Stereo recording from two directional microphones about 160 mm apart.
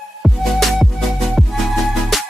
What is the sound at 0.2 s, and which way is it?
Music, centre (ahead or behind).